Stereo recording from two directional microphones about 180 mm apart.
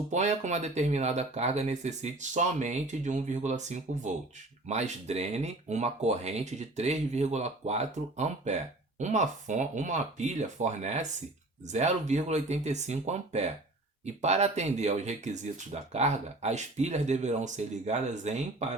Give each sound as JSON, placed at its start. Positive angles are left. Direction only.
{"t": 0.1, "sound": "speech", "side_deg": -40}